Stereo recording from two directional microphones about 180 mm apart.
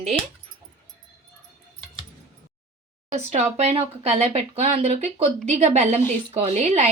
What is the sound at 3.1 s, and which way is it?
Speech, 40° right (ahead or behind).